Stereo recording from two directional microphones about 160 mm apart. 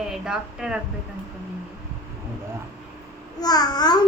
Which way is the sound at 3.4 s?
25° left (ahead or behind).